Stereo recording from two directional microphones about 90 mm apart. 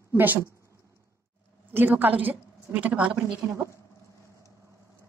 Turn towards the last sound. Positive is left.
turn(degrees=-15)  # may be behind; listen again after turning